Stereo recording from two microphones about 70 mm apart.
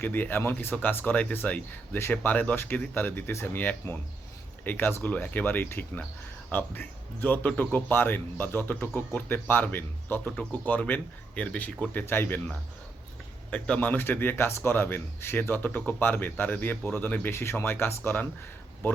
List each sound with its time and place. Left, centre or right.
0.0 s a man's voice: left
2.0 s speech: left
2.3 s a man's voice: left
13.5 s a man's voice: centre